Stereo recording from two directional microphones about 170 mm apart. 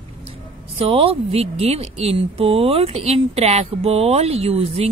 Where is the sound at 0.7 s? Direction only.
35° right (ahead or behind).